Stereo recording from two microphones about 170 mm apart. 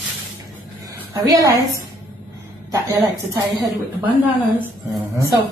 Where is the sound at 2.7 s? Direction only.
20° right (ahead or behind).